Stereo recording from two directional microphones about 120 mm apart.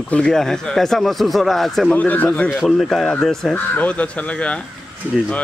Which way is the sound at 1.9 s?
15° left (ahead or behind).